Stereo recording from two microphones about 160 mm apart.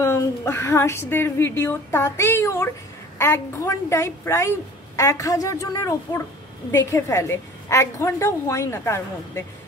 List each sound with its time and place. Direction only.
0.0 s a woman's voice: 15° left (ahead or behind)